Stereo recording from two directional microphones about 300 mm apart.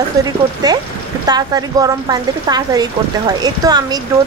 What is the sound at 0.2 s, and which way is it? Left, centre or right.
Speech, centre.